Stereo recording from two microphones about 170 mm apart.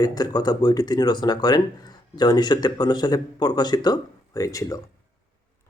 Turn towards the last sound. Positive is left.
turn(degrees=20)  # may be behind; listen again after turning